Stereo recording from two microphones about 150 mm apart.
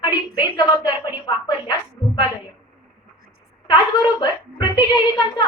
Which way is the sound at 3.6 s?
30° left (ahead or behind).